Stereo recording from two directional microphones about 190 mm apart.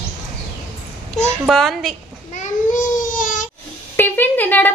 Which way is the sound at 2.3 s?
40° left (ahead or behind).